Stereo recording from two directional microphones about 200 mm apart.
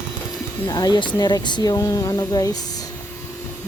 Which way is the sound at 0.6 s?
20° left (ahead or behind).